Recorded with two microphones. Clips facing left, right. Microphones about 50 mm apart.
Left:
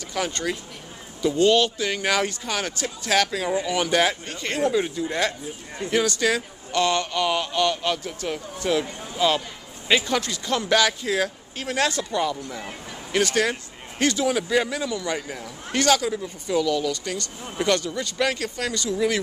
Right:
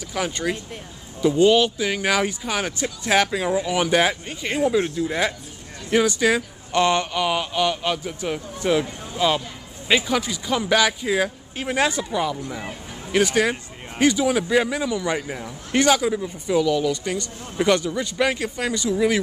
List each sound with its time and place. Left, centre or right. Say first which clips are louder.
0.1 s speech: right 2 dB; centre
4.8 s speech: right 3 dB; centre
5.9 s speech: right 3 dB; centre